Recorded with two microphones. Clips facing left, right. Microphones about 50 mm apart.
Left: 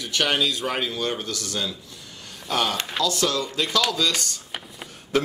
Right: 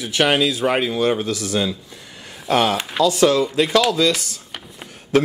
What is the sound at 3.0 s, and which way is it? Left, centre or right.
Speech, centre.